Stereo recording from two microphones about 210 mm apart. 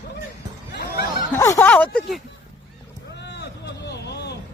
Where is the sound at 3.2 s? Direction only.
55° left (ahead or behind).